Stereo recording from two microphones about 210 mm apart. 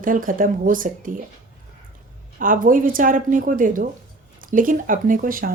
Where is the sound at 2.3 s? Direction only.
40° right (ahead or behind).